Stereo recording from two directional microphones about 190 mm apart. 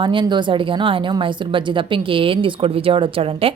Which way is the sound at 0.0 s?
25° right (ahead or behind).